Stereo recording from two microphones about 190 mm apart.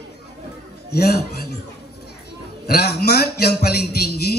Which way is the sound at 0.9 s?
55° left (ahead or behind).